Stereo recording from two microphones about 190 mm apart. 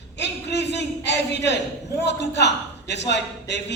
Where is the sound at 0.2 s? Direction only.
65° left (ahead or behind).